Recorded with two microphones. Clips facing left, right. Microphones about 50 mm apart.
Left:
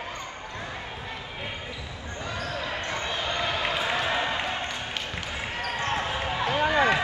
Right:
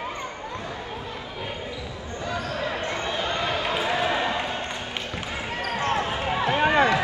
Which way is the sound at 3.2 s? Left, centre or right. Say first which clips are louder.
Right 1 dB; right.